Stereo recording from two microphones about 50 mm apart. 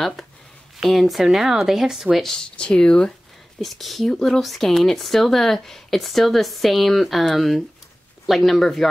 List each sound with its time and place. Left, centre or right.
0.0 s speech: centre
2.2 s speech: centre
3.6 s speech: centre